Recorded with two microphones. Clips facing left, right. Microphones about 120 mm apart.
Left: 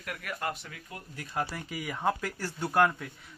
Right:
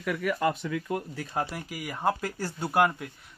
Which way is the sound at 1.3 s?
20° right (ahead or behind).